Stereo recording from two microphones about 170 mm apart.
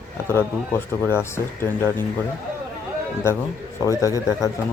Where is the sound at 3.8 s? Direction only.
20° left (ahead or behind).